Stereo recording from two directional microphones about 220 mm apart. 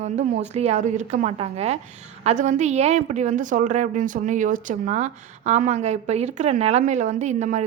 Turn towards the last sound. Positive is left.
turn(degrees=-30)  # may be behind; listen again after turning